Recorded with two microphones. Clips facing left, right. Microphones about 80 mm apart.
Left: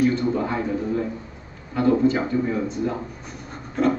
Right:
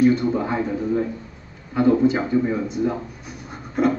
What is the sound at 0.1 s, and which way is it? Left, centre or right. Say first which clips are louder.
Speech: right 2 dB; centre.